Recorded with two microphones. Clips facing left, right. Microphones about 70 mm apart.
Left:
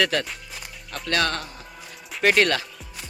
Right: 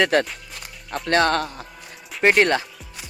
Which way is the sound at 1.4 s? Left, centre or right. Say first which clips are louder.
Right 9 dB; right.